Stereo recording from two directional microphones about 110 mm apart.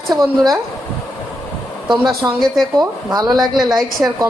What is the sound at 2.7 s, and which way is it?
Speech, 40° right (ahead or behind).